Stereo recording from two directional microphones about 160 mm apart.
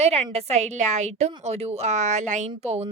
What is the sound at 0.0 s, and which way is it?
A woman's voice, 40° right (ahead or behind).